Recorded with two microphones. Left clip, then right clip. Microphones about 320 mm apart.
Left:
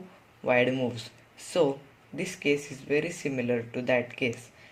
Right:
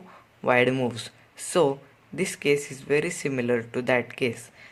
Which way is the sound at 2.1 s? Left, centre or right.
Right.